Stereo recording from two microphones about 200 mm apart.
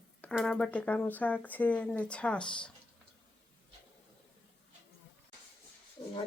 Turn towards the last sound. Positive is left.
turn(degrees=20)  # may be behind; listen again after turning